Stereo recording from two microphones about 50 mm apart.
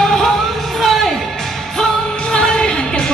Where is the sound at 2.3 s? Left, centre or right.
Centre.